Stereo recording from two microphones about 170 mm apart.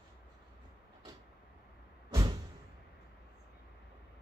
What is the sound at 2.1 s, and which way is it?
Vehicle, 25° right (ahead or behind).